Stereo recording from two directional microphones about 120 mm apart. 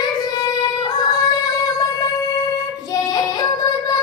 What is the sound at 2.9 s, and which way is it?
Child singing, 30° left (ahead or behind).